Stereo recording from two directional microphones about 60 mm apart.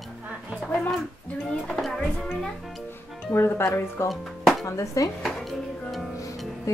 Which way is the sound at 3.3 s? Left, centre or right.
Left.